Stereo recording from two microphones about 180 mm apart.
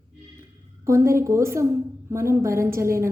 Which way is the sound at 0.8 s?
15° right (ahead or behind).